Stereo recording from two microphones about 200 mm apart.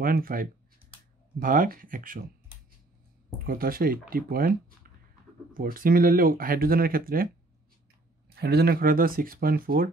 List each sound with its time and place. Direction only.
0.0 s speech: 45° right (ahead or behind)
3.4 s speech: 45° right (ahead or behind)
8.4 s speech: 50° right (ahead or behind)